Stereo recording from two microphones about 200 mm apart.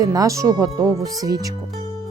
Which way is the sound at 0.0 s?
20° right (ahead or behind).